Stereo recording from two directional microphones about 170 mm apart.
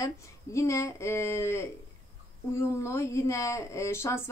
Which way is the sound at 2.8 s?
15° left (ahead or behind).